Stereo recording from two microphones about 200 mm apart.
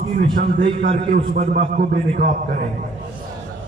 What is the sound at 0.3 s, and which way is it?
A man's voice, 55° right (ahead or behind).